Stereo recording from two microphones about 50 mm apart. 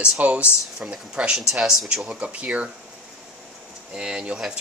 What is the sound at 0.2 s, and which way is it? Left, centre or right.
Speech, right.